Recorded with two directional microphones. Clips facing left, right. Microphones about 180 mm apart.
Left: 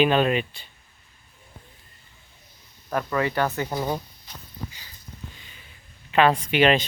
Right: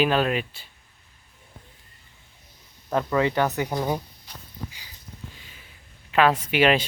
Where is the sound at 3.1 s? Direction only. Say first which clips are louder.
Right 2 dB; 20° right (ahead or behind).